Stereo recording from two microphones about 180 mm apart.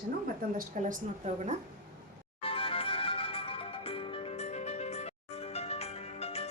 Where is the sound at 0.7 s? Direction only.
45° right (ahead or behind).